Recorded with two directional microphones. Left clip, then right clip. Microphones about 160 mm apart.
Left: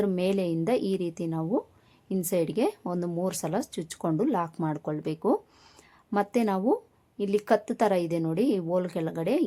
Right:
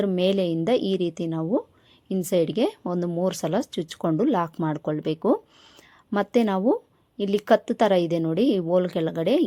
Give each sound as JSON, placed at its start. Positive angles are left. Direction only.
{"t": 0.0, "sound": "speech", "side_deg": -25}